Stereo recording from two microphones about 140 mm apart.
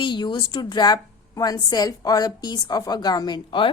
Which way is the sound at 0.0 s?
35° left (ahead or behind).